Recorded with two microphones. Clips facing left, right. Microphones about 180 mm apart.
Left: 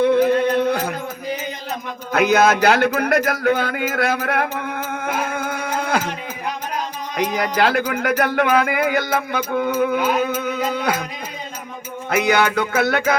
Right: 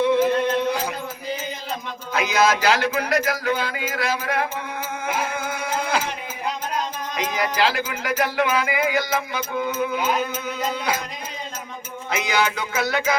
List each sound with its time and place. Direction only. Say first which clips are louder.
0.0 s music: left 3 dB; 55° left (ahead or behind)
2.1 s a man's voice: left 5 dB; 55° left (ahead or behind)
5.0 s music: left 2 dB; 55° left (ahead or behind)
7.3 s a man's voice: left 3 dB; 55° left (ahead or behind)
12.1 s a man's voice: left 6 dB; 55° left (ahead or behind)